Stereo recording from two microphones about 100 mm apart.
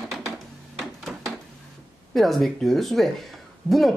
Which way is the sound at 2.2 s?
Centre (ahead or behind).